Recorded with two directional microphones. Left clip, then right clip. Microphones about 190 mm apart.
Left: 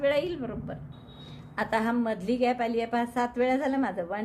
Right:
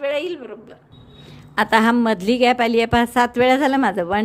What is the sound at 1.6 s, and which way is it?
A woman's voice, 45° right (ahead or behind).